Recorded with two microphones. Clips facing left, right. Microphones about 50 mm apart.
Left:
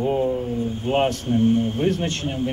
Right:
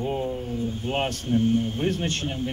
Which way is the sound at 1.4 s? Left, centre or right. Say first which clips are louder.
Left 5 dB; left.